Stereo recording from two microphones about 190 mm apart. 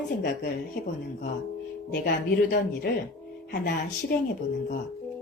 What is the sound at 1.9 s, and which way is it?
A woman's voice, 50° left (ahead or behind).